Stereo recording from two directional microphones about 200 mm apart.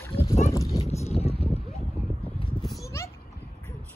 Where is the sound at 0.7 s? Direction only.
30° left (ahead or behind).